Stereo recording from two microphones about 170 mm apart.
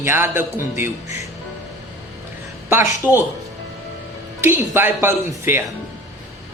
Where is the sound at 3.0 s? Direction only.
20° left (ahead or behind).